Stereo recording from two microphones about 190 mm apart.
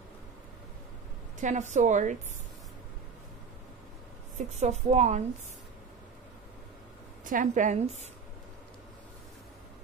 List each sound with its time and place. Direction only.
1.4 s a woman's voice: 40° right (ahead or behind)
4.4 s a woman's voice: 35° right (ahead or behind)
7.2 s a woman's voice: 45° right (ahead or behind)